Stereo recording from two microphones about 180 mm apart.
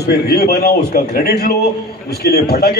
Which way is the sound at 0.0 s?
65° left (ahead or behind).